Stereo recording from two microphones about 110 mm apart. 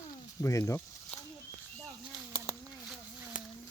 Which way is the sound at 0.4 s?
25° left (ahead or behind).